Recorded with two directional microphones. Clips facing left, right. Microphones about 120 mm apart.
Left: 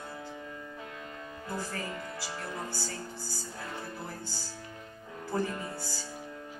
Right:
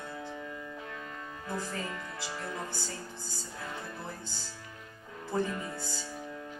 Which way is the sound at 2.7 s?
20° right (ahead or behind).